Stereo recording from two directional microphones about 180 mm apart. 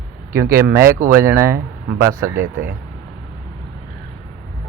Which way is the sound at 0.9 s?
50° right (ahead or behind).